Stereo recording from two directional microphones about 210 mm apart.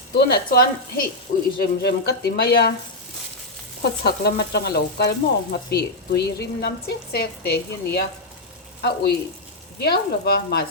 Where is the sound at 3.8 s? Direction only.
50° left (ahead or behind).